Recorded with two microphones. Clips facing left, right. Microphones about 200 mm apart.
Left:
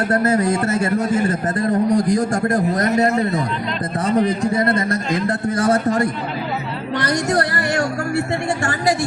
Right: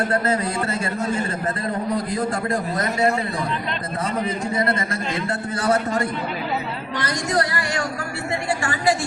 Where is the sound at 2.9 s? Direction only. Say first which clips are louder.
Left 2 dB; 20° left (ahead or behind).